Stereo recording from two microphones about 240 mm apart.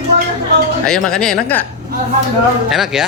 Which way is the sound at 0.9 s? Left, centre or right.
Centre.